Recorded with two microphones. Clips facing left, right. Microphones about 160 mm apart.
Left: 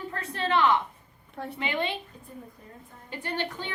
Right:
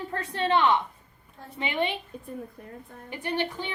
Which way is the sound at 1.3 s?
70° left (ahead or behind).